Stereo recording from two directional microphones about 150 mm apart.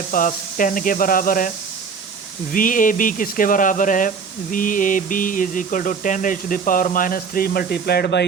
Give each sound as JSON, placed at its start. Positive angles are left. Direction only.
{"t": 0.1, "sound": "speech", "side_deg": 65}